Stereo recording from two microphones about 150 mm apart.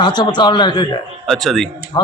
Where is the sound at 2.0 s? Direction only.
30° left (ahead or behind).